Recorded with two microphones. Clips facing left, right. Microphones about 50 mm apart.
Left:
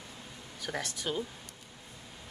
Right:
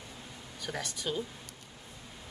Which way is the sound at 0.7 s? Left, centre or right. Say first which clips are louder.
Left 1 dB; centre.